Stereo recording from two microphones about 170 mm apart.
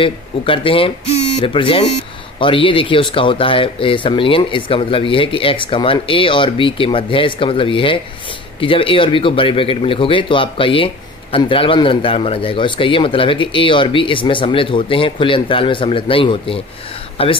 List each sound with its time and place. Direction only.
0.0 s speech: 30° left (ahead or behind)